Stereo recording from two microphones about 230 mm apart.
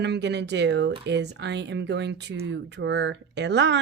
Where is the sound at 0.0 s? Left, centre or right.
Right.